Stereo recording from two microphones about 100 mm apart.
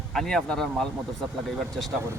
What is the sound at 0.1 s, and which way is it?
Speech, 5° left (ahead or behind).